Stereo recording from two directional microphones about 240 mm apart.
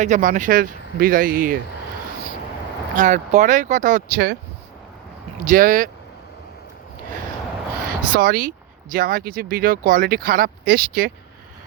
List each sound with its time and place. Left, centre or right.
0.0 s speech: right
2.9 s speech: right
5.5 s speech: right
8.1 s speech: right